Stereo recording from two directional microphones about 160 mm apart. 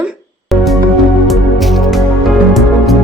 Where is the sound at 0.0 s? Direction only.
Centre (ahead or behind).